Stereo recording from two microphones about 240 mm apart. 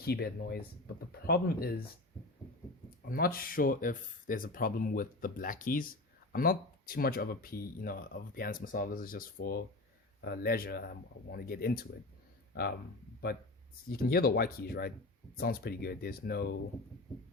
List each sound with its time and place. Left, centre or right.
0.0 s speech: left
3.1 s speech: left
13.9 s speech: left